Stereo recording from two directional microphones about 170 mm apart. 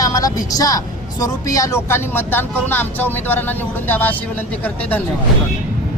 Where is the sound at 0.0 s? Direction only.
20° left (ahead or behind).